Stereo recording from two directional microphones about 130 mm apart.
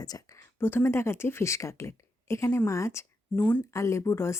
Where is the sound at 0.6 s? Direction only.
15° left (ahead or behind).